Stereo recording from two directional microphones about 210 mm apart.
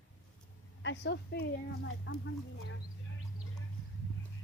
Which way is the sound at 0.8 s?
55° left (ahead or behind).